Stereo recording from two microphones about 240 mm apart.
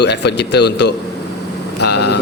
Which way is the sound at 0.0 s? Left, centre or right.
Left.